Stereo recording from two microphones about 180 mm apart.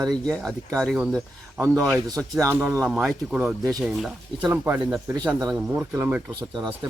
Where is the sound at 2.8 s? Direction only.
Centre (ahead or behind).